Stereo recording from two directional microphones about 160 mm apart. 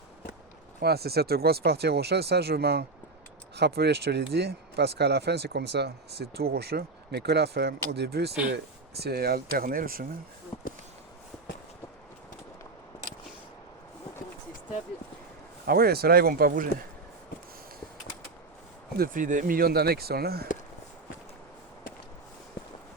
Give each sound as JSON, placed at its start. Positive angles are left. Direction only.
{"t": 0.8, "sound": "speech", "side_deg": -80}
{"t": 15.6, "sound": "speech", "side_deg": -75}
{"t": 18.9, "sound": "speech", "side_deg": -60}